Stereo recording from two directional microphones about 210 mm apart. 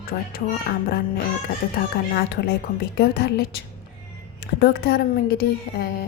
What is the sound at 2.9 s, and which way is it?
Speech, 50° left (ahead or behind).